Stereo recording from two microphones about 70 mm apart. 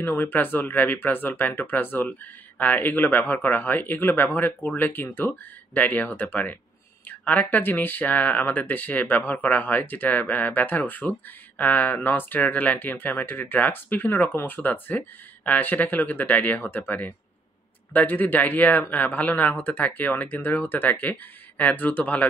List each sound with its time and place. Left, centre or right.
0.0 s speech: left